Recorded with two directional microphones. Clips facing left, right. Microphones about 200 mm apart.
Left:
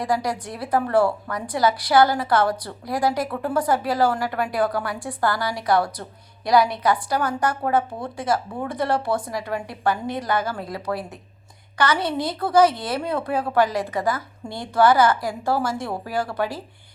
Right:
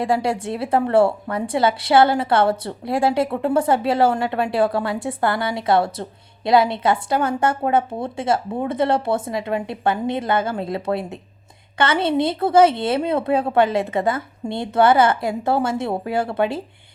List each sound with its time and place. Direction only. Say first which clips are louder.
0.0 s a woman's voice: right 4 dB; 25° right (ahead or behind)